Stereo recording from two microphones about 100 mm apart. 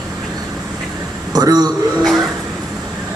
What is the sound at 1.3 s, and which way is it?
Speech, 40° right (ahead or behind).